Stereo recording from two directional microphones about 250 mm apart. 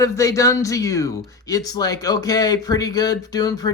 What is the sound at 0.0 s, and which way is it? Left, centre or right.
Speech, centre.